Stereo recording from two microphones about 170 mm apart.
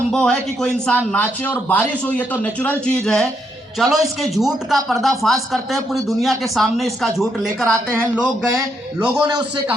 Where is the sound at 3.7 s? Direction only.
Centre (ahead or behind).